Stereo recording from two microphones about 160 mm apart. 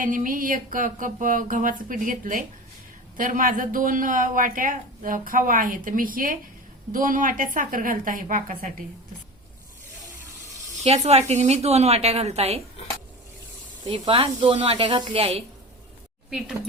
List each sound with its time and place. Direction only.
0.0 s speech: 55° right (ahead or behind)
10.8 s a woman's voice: 40° right (ahead or behind)
13.8 s a woman's voice: 30° right (ahead or behind)